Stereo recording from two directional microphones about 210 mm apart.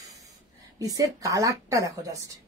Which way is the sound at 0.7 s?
15° right (ahead or behind).